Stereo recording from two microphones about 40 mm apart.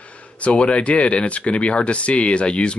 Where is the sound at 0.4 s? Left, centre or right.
Left.